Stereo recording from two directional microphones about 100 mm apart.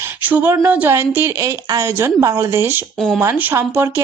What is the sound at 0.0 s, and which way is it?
A woman's voice, 20° right (ahead or behind).